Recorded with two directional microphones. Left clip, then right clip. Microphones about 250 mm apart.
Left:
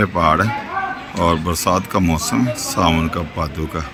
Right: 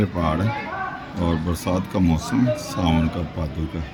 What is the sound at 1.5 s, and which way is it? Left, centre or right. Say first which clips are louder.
Speech: left 8 dB; centre.